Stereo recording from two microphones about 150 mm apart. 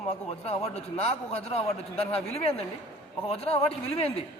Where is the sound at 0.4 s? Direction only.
45° left (ahead or behind).